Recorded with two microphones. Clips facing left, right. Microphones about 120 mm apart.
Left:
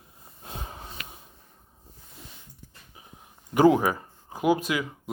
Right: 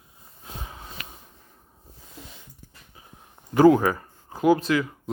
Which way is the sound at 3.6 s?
15° left (ahead or behind).